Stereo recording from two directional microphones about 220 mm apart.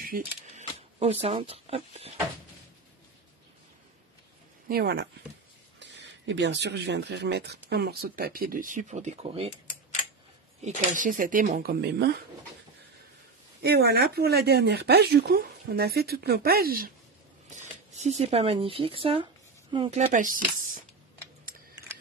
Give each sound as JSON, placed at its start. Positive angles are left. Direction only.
{"t": 0.0, "sound": "speech", "side_deg": -35}
{"t": 4.6, "sound": "speech", "side_deg": -45}
{"t": 10.6, "sound": "speech", "side_deg": -35}
{"t": 13.6, "sound": "speech", "side_deg": -45}
{"t": 17.6, "sound": "speech", "side_deg": -30}